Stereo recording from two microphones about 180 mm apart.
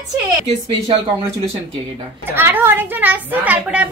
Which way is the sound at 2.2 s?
10° right (ahead or behind).